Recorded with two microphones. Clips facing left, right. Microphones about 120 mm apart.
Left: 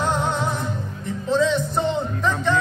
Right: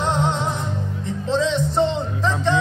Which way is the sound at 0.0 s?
25° right (ahead or behind).